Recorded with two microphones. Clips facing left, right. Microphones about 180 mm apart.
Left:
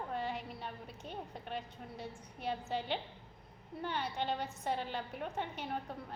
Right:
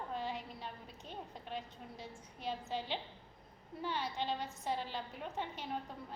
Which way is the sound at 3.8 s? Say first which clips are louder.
Left 1 dB; 60° left (ahead or behind).